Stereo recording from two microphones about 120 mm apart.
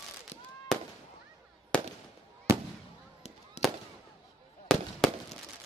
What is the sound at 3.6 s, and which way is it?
Fireworks, 65° left (ahead or behind).